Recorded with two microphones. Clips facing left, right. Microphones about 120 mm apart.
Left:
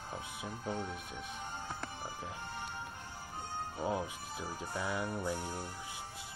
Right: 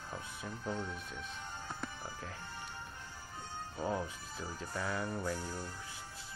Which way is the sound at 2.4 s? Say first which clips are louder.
Left 4 dB; 55° left (ahead or behind).